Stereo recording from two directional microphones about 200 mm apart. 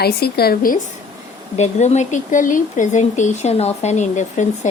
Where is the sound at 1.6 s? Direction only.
35° left (ahead or behind).